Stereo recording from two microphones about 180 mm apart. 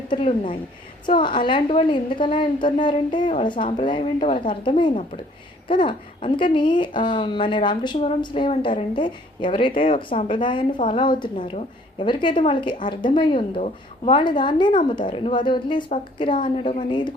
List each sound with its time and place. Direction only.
0.1 s a woman's voice: 30° left (ahead or behind)